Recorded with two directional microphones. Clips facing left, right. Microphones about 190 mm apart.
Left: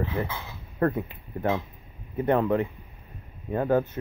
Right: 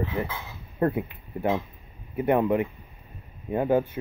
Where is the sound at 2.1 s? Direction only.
15° right (ahead or behind).